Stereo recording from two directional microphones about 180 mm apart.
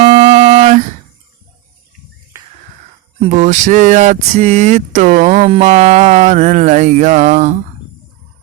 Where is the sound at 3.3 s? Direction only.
45° right (ahead or behind).